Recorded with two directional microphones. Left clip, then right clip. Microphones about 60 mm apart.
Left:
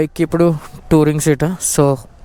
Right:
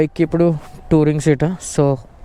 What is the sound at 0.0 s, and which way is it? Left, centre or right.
Speech, left.